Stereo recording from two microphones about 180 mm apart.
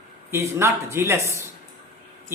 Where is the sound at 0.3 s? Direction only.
15° right (ahead or behind).